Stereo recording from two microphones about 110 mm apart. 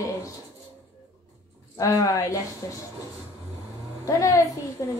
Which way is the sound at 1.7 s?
30° left (ahead or behind).